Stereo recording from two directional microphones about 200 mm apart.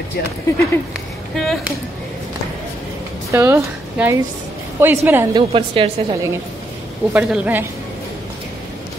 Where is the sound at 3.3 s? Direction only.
15° right (ahead or behind).